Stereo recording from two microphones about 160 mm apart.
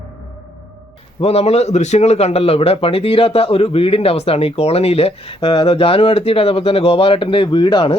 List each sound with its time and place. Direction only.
1.2 s a man's voice: 40° left (ahead or behind)